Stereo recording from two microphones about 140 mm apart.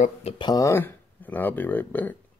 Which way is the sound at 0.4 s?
25° left (ahead or behind).